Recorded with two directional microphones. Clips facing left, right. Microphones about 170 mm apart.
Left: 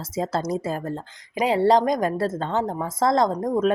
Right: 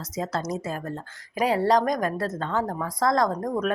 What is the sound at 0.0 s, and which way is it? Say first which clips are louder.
Speech: left 4 dB; 30° left (ahead or behind).